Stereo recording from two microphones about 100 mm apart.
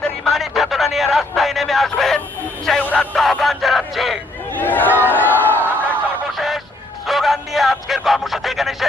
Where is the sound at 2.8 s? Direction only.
15° left (ahead or behind).